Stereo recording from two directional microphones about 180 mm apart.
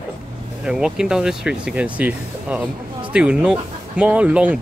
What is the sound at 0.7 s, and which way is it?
Speech, 5° right (ahead or behind).